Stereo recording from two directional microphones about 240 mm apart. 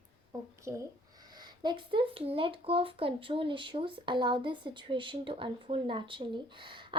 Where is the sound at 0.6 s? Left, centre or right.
Centre.